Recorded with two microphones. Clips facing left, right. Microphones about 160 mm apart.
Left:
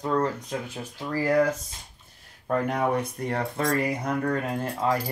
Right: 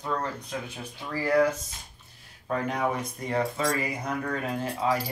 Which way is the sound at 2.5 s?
55° left (ahead or behind).